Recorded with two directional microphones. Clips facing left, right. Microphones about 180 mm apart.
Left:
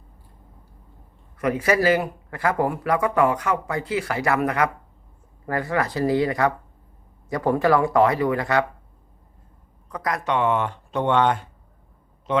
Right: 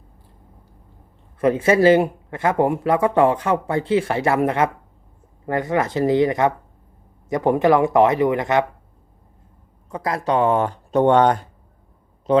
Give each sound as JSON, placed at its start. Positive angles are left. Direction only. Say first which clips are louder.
{"t": 1.4, "sound": "speech", "louder": "right 5 dB", "side_deg": -25}
{"t": 9.9, "sound": "speech", "louder": "right 4 dB", "side_deg": -25}